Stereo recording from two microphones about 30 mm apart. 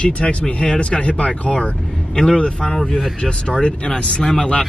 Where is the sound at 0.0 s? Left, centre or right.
Left.